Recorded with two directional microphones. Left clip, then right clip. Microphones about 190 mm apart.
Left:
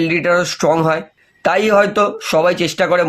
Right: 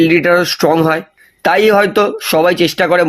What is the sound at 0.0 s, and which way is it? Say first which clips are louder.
Speech: right 5 dB; 40° right (ahead or behind).